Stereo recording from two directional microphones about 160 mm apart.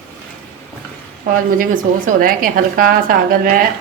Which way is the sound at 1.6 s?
60° right (ahead or behind).